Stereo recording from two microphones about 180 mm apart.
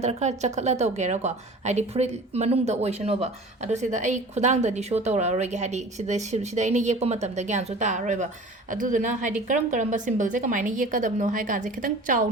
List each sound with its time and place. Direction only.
0.0 s a woman's voice: 40° right (ahead or behind)